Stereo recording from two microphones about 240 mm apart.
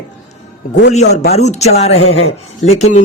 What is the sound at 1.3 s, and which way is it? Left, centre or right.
Speech, left.